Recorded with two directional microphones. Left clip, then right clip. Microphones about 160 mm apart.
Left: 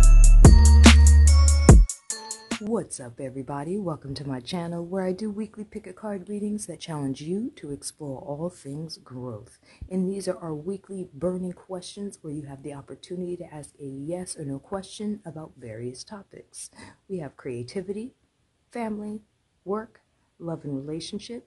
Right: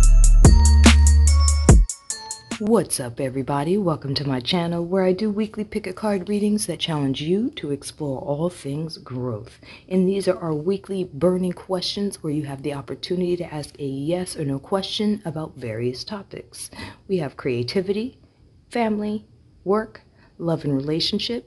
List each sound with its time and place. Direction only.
0.0 s music: centre (ahead or behind)
1.9 s speech: centre (ahead or behind)
20.3 s speech: 5° left (ahead or behind)